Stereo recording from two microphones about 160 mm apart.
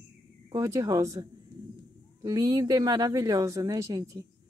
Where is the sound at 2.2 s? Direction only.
25° right (ahead or behind).